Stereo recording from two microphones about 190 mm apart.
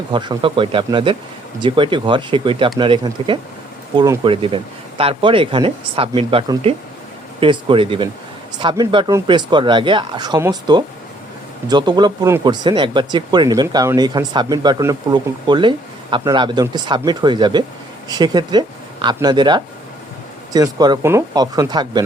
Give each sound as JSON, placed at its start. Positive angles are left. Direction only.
{"t": 0.1, "sound": "speech", "side_deg": -25}